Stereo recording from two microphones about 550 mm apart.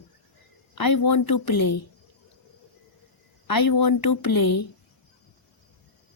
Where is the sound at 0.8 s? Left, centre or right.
Left.